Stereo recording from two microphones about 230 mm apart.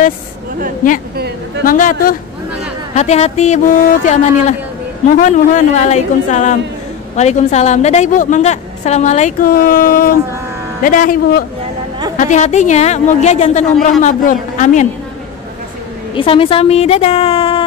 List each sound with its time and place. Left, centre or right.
1.6 s a woman's voice: left
16.2 s a man's voice: left